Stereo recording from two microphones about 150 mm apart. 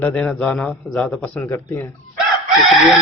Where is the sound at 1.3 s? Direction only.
20° left (ahead or behind).